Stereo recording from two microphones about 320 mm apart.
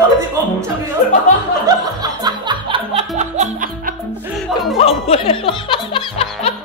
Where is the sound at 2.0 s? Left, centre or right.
Centre.